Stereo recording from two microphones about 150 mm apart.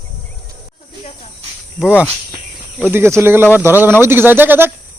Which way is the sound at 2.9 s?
15° right (ahead or behind).